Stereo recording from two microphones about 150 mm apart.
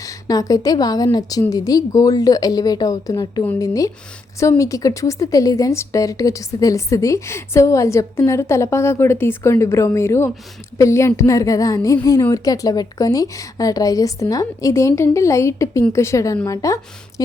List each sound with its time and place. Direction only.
0.0 s a woman's voice: 25° left (ahead or behind)